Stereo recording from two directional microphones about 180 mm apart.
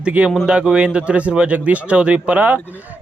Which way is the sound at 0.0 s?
5° right (ahead or behind).